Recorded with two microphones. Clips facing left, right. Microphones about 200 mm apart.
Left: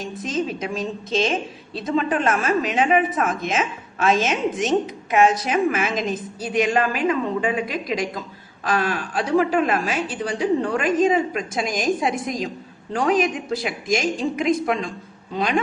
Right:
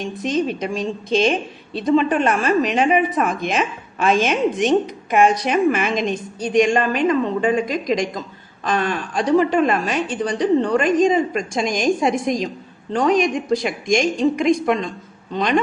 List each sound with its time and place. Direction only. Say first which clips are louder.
0.0 s a woman's voice: right 4 dB; centre (ahead or behind)